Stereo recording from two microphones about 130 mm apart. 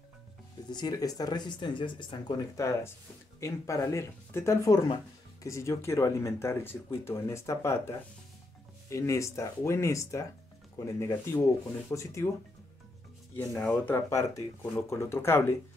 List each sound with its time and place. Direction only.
0.7 s speech: 30° left (ahead or behind)
13.4 s speech: 15° left (ahead or behind)